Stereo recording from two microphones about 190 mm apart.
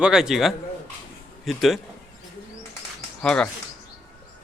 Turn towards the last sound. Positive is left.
turn(degrees=5)  # may be behind; listen again after turning